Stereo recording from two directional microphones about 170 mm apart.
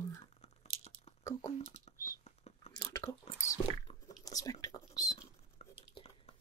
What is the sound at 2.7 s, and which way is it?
Biting, 20° left (ahead or behind).